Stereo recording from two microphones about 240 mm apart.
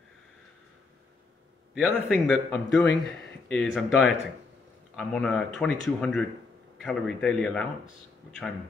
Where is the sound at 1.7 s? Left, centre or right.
Centre.